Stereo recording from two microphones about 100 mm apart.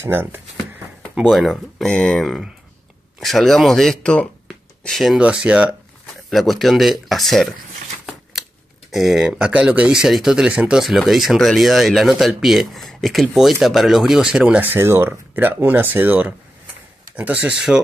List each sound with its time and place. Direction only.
0.0 s a sound: 20° right (ahead or behind)
1.2 s speech: 5° right (ahead or behind)
1.9 s speech: 10° left (ahead or behind)
5.2 s speech: 10° right (ahead or behind)
6.3 s speech: centre (ahead or behind)
8.1 s a sound: centre (ahead or behind)
8.9 s speech: centre (ahead or behind)